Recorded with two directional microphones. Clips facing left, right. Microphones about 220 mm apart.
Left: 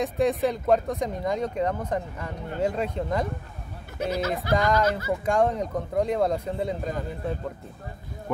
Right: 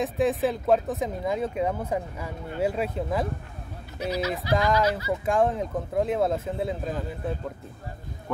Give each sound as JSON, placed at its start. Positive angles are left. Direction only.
{"t": 0.0, "sound": "speech", "side_deg": 0}
{"t": 4.0, "sound": "speech", "side_deg": 50}
{"t": 4.6, "sound": "speech", "side_deg": 0}